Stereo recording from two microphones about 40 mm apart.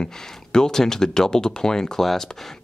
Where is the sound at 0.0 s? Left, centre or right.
Centre.